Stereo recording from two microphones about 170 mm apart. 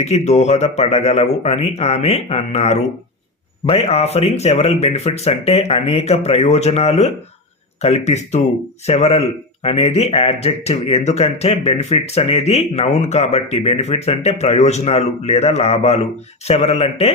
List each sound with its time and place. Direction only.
0.0 s speech: 40° left (ahead or behind)